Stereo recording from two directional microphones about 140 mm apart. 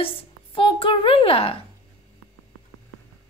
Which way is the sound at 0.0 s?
40° left (ahead or behind).